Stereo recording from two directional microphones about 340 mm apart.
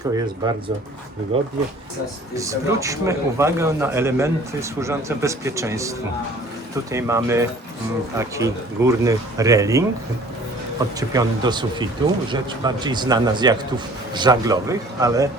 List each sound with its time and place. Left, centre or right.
0.0 s a man's voice: centre
6.9 s a man's voice: centre
11.1 s a man's voice: centre